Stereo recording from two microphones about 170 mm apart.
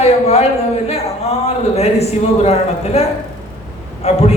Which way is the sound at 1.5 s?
35° left (ahead or behind).